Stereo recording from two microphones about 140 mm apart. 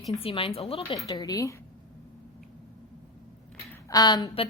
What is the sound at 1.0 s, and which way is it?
Speech, 25° left (ahead or behind).